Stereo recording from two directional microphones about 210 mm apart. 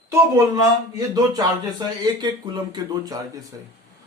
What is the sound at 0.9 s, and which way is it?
Speech, 15° right (ahead or behind).